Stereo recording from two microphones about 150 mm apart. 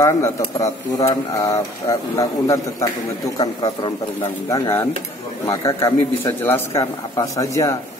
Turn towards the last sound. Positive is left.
turn(degrees=20)  # may be behind; listen again after turning